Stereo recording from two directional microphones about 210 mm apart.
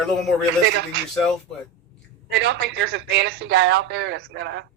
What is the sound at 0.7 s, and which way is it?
Speech, 55° right (ahead or behind).